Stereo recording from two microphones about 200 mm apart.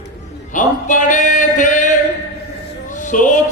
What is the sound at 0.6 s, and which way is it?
Male singing, 40° left (ahead or behind).